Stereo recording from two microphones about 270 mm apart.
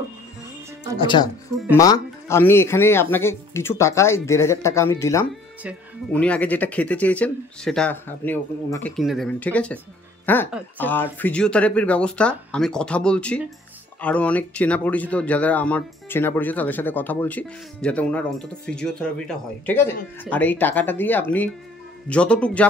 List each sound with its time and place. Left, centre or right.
0.9 s speech: centre
5.6 s speech: centre